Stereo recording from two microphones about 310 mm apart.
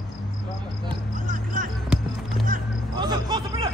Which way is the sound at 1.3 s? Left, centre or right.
Right.